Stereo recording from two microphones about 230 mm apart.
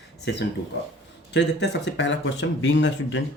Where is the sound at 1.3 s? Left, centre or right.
Left.